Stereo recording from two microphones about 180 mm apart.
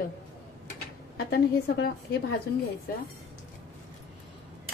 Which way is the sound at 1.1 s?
60° left (ahead or behind).